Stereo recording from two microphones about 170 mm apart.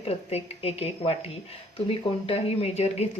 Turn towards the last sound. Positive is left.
turn(degrees=40)  # may be behind; listen again after turning